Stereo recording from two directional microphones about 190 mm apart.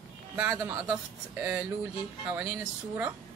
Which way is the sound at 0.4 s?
10° right (ahead or behind).